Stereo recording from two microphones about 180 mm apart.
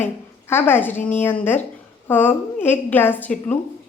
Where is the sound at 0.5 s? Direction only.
10° left (ahead or behind).